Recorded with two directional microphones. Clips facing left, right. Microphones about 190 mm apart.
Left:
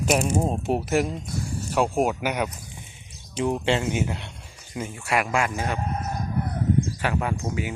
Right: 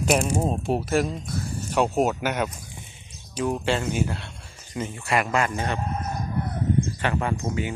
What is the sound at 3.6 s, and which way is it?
Speech, 20° left (ahead or behind).